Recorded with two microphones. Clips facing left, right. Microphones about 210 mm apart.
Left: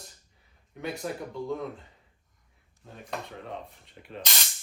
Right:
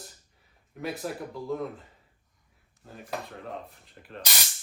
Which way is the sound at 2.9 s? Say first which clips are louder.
Right 1 dB; centre (ahead or behind).